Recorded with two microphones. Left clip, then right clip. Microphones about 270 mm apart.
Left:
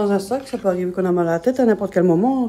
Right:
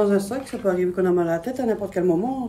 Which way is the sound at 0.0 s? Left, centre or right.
Centre.